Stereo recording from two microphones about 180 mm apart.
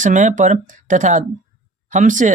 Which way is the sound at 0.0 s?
45° right (ahead or behind).